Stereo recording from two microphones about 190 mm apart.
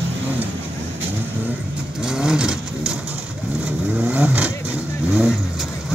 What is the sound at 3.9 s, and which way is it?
Vehicle, 5° right (ahead or behind).